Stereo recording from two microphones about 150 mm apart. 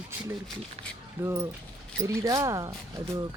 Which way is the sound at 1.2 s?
20° right (ahead or behind).